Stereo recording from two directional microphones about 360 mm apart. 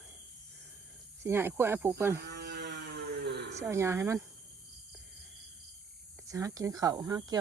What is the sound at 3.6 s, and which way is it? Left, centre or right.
Speech, centre.